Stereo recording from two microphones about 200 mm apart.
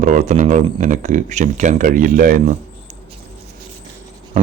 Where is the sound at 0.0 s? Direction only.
35° right (ahead or behind).